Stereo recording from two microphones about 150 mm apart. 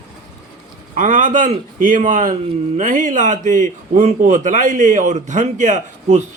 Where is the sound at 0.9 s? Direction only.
60° right (ahead or behind).